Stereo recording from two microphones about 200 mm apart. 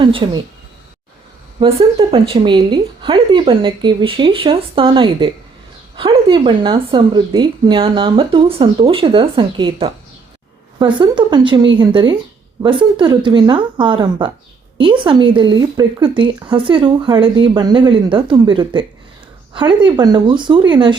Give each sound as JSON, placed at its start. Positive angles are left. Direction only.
{"t": 0.0, "sound": "speech", "side_deg": -25}
{"t": 1.5, "sound": "speech", "side_deg": -30}